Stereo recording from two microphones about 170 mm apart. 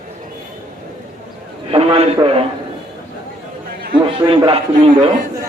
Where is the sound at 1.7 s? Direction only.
35° right (ahead or behind).